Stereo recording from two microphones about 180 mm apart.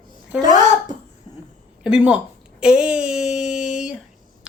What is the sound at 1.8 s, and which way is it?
Speech, 5° right (ahead or behind).